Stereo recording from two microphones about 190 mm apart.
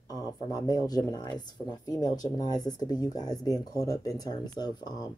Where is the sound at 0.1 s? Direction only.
20° left (ahead or behind).